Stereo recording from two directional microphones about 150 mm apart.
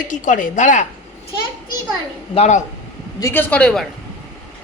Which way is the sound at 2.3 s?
45° left (ahead or behind).